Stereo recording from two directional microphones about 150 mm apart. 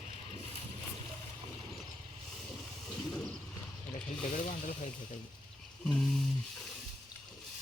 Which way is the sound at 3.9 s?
60° left (ahead or behind).